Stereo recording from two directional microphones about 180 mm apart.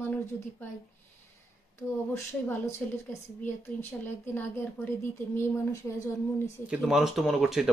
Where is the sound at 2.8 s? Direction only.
10° left (ahead or behind).